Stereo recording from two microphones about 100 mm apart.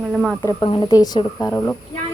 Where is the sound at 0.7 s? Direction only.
50° left (ahead or behind).